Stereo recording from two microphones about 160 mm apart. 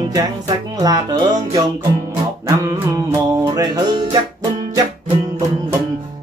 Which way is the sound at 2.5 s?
20° right (ahead or behind).